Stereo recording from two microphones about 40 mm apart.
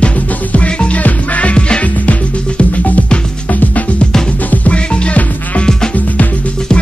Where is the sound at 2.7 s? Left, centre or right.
Left.